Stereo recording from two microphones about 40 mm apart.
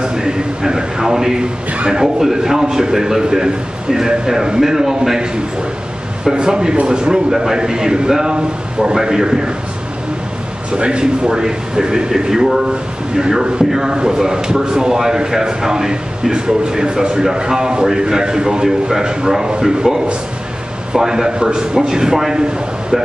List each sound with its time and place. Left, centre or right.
0.0 s a man's voice: centre
10.8 s a man's voice: right